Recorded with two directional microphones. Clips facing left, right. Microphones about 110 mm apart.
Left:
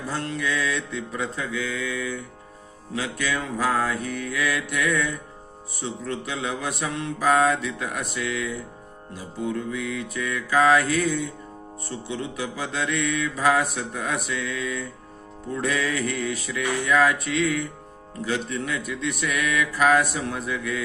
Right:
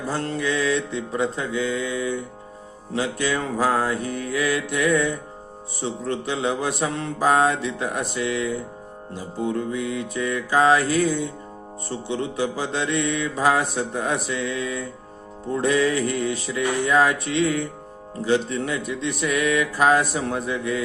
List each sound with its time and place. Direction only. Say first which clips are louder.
0.1 s mantra: right 3 dB; 35° right (ahead or behind)